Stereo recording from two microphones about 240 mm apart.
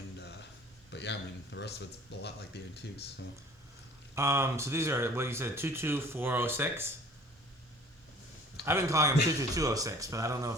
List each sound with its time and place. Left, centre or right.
0.9 s speech: left
4.1 s speech: centre
8.6 s speech: centre